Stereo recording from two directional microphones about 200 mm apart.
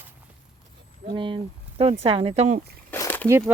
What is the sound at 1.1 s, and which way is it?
Speech, 25° right (ahead or behind).